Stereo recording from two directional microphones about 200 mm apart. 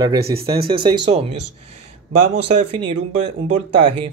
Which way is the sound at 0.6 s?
25° right (ahead or behind).